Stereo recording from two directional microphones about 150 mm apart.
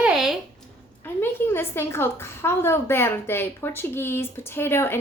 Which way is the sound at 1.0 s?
15° left (ahead or behind).